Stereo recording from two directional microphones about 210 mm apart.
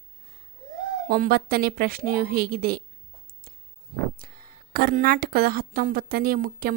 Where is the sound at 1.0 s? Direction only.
45° right (ahead or behind).